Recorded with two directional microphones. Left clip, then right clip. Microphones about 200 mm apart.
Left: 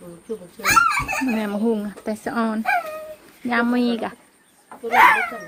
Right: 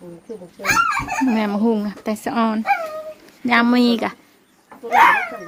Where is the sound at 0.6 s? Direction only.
50° left (ahead or behind).